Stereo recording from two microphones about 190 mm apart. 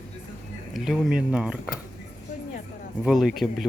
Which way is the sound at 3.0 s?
Centre (ahead or behind).